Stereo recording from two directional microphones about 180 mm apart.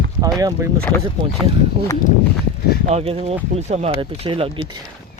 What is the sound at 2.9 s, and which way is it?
Speech, 35° right (ahead or behind).